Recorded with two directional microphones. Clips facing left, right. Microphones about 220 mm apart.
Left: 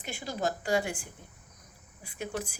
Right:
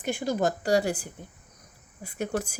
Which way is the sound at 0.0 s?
45° right (ahead or behind).